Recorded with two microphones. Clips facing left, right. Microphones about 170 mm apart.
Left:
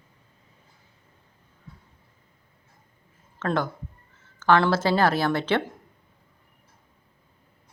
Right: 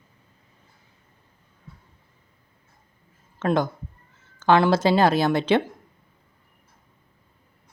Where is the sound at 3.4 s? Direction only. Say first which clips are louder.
Right 4 dB; 15° right (ahead or behind).